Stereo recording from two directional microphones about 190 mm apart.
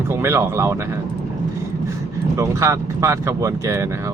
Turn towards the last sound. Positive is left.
turn(degrees=-15)  # may be behind; listen again after turning